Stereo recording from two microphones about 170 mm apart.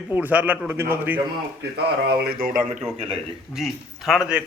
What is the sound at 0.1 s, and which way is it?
A man's voice, 10° right (ahead or behind).